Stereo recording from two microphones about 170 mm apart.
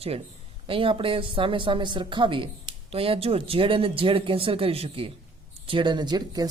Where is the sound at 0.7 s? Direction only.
30° right (ahead or behind).